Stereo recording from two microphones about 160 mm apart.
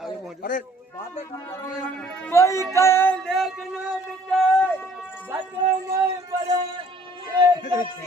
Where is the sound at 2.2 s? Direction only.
15° left (ahead or behind).